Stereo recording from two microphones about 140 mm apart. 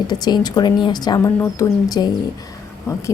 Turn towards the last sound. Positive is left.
turn(degrees=20)  # may be behind; listen again after turning